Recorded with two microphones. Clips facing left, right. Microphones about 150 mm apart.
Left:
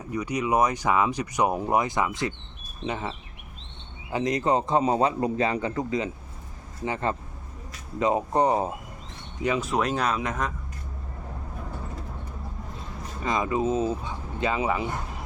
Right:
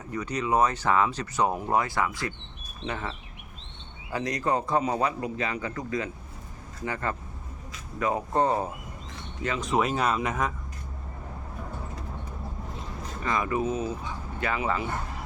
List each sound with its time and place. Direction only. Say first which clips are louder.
0.1 s speech: left 2 dB; 10° left (ahead or behind)
9.6 s speech: even; centre (ahead or behind)
13.2 s speech: left 2 dB; 20° left (ahead or behind)